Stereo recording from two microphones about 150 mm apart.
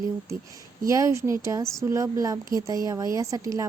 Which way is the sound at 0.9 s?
20° right (ahead or behind).